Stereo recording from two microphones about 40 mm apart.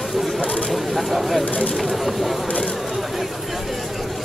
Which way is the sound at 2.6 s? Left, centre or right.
Centre.